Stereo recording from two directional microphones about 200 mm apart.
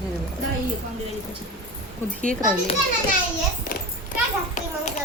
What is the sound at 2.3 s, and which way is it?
Speech, 45° right (ahead or behind).